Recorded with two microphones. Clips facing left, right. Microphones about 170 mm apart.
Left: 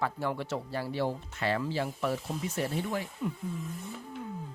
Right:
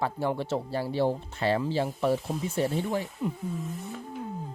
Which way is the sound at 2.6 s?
Centre (ahead or behind).